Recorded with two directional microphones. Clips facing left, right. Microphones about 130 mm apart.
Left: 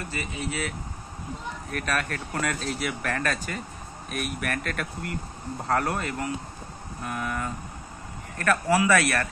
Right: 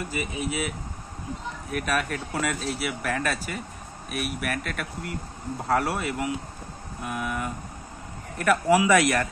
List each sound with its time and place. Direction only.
0.1 s speech: 10° right (ahead or behind)